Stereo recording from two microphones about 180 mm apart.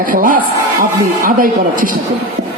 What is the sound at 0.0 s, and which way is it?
A man's voice, 50° right (ahead or behind).